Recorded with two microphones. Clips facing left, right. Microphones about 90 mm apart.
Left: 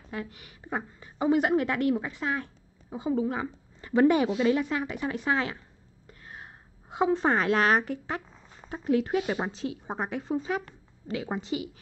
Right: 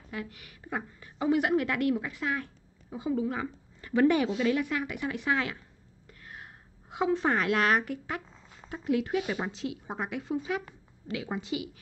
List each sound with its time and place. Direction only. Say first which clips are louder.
0.1 s a woman's voice: left 2 dB; 30° left (ahead or behind)
6.0 s a sound: left 1 dB; 30° left (ahead or behind)
8.5 s speech: left 3 dB; 35° left (ahead or behind)